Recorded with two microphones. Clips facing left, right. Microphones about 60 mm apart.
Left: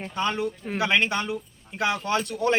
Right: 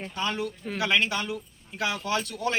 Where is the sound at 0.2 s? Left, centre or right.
Left.